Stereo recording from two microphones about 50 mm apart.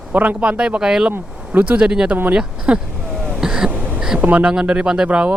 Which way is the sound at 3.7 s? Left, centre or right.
Right.